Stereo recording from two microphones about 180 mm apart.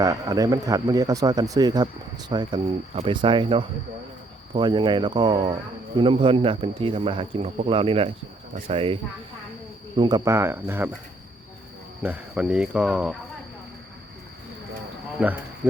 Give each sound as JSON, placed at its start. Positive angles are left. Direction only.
{"t": 0.0, "sound": "speech", "side_deg": -20}
{"t": 10.0, "sound": "speech", "side_deg": -20}
{"t": 12.0, "sound": "cricket", "side_deg": -5}
{"t": 15.2, "sound": "speech", "side_deg": -5}